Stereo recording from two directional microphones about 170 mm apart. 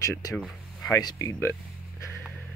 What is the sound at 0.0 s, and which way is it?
Speech, 20° left (ahead or behind).